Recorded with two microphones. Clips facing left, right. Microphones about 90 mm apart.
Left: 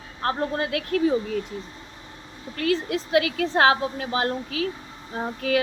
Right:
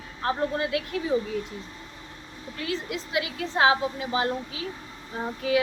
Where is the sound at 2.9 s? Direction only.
60° left (ahead or behind).